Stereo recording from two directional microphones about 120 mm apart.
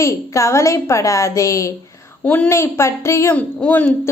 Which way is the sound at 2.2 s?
10° left (ahead or behind).